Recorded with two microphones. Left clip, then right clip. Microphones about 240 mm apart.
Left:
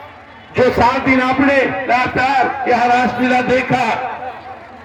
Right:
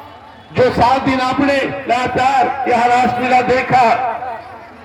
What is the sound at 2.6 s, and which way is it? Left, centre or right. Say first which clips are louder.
Speech: even; centre.